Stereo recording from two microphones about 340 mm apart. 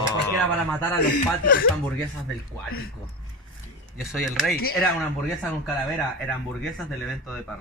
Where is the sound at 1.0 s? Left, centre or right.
Left.